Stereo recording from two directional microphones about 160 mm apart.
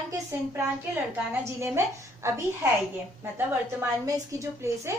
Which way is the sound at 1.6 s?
15° right (ahead or behind).